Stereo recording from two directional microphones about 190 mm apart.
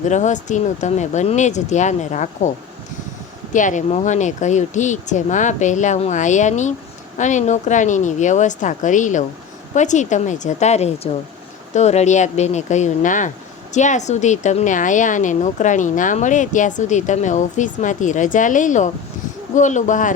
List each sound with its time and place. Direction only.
0.0 s a woman's voice: 40° left (ahead or behind)
3.5 s a woman's voice: 40° left (ahead or behind)